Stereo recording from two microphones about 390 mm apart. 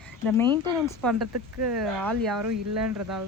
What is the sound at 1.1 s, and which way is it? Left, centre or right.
Speech, right.